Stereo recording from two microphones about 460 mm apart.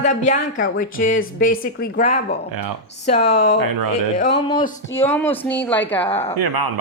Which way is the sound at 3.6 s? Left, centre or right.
Right.